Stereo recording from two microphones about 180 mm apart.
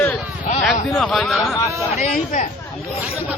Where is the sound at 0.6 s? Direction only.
Centre (ahead or behind).